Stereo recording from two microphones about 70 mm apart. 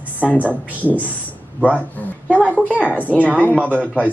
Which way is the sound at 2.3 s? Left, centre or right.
Right.